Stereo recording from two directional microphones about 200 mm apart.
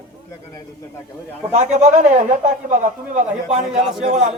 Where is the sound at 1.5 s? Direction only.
35° right (ahead or behind).